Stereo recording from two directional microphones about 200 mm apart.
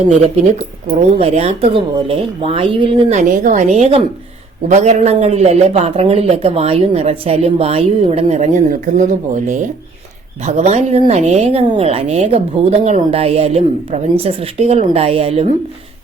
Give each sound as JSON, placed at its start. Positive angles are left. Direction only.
{"t": 1.2, "sound": "a woman's voice", "side_deg": -30}
{"t": 3.2, "sound": "a woman's voice", "side_deg": -40}